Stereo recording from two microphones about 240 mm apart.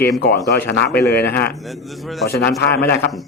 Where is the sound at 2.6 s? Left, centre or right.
Left.